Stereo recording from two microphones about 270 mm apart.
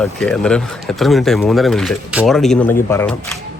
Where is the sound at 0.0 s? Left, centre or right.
Centre.